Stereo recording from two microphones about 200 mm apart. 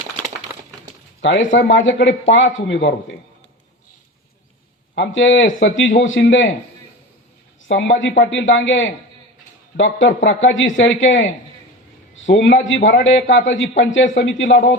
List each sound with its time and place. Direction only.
1.2 s a woman's voice: 65° left (ahead or behind)
4.9 s a woman's voice: 70° left (ahead or behind)
6.2 s speech: 60° left (ahead or behind)
7.6 s a woman's voice: 70° left (ahead or behind)